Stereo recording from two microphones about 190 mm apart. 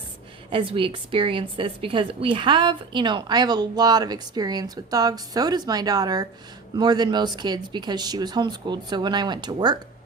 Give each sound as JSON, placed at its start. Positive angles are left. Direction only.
{"t": 0.5, "sound": "a woman's voice", "side_deg": -30}